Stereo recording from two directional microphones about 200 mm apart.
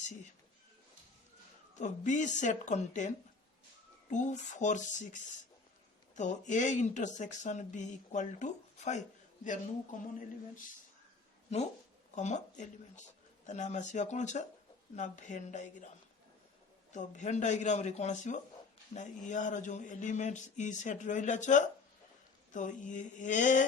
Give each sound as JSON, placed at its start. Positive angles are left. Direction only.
{"t": 1.7, "sound": "speech", "side_deg": 35}
{"t": 4.1, "sound": "speech", "side_deg": 40}
{"t": 12.1, "sound": "speech", "side_deg": 35}
{"t": 16.9, "sound": "speech", "side_deg": 40}